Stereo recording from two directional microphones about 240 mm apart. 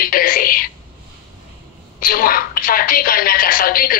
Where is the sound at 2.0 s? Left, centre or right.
Left.